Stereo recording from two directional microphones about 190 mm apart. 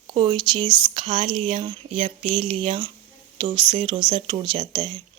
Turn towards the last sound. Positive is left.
turn(degrees=-25)  # may be behind; listen again after turning